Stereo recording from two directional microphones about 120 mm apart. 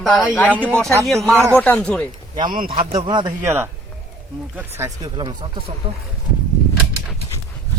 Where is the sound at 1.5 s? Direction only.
10° left (ahead or behind).